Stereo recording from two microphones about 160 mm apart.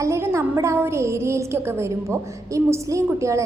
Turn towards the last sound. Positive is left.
turn(degrees=-20)  # may be behind; listen again after turning